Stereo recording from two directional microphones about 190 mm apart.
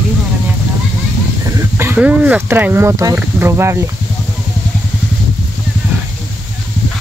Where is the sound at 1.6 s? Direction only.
15° right (ahead or behind).